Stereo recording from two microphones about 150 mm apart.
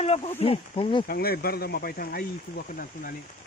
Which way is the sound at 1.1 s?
90° left.